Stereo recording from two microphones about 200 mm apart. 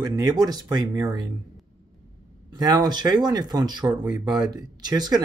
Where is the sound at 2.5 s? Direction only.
20° right (ahead or behind).